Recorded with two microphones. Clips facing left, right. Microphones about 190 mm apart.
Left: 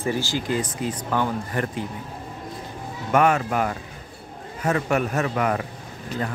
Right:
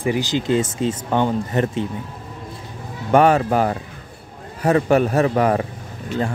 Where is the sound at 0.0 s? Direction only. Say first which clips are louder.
Right 5 dB; 15° right (ahead or behind).